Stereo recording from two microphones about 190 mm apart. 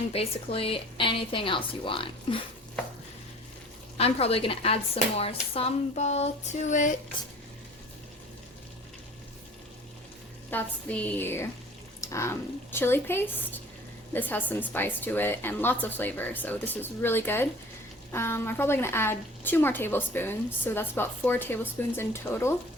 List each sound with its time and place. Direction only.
0.1 s a woman's voice: 30° left (ahead or behind)
3.9 s speech: 30° left (ahead or behind)
10.5 s a woman's voice: 10° left (ahead or behind)